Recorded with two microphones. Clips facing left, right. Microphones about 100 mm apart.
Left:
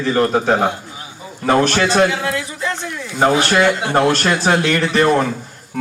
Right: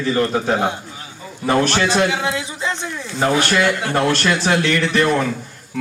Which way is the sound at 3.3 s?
35° left (ahead or behind).